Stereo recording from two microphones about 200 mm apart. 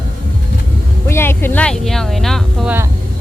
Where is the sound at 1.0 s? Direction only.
10° left (ahead or behind).